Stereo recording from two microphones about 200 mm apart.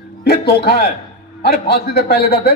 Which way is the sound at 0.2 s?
50° left (ahead or behind).